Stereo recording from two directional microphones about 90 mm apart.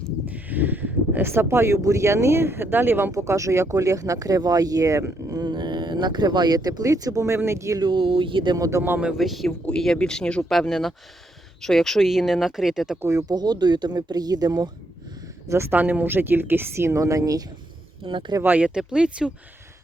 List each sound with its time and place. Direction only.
0.3 s speech: 20° right (ahead or behind); by 5.4 s 35° right (ahead or behind)
5.4 s speech: 55° right (ahead or behind); by 7.8 s 30° right (ahead or behind)
7.8 s speech: 65° right (ahead or behind)
8.5 s speech: 40° right (ahead or behind)
9.0 s speech: 5° right (ahead or behind)
13.0 s speech: 35° right (ahead or behind)
15.4 s speech: 30° right (ahead or behind)
18.0 s speech: 65° right (ahead or behind)
18.4 s speech: 15° right (ahead or behind)